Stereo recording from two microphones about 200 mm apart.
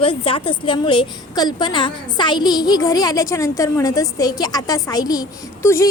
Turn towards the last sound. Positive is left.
turn(degrees=15)  # may be behind; listen again after turning